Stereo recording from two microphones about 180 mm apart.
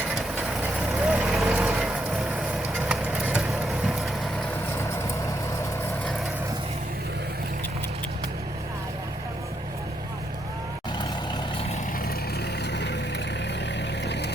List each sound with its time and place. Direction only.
1.0 s vehicle: 5° right (ahead or behind)
2.7 s clip-clop: 5° right (ahead or behind)
12.7 s vehicle: 75° left (ahead or behind)